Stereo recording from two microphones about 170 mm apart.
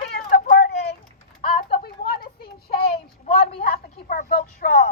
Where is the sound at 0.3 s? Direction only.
65° left (ahead or behind).